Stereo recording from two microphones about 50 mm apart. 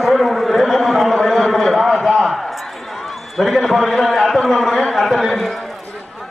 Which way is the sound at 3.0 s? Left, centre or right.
Centre.